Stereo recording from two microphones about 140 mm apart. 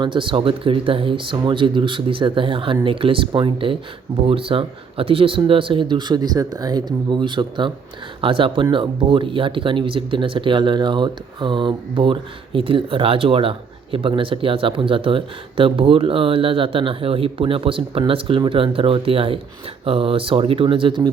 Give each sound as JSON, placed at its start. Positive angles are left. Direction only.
{"t": 0.0, "sound": "speech", "side_deg": -35}